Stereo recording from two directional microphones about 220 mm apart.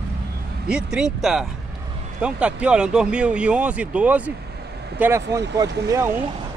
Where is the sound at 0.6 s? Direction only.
5° right (ahead or behind).